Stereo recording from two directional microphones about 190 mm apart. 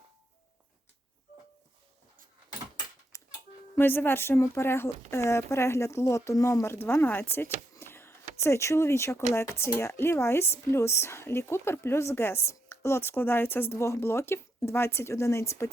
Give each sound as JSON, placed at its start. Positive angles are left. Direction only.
{"t": 3.1, "sound": "music", "side_deg": 15}
{"t": 3.8, "sound": "speech", "side_deg": 10}
{"t": 7.8, "sound": "a sound", "side_deg": 15}
{"t": 9.3, "sound": "speech", "side_deg": 15}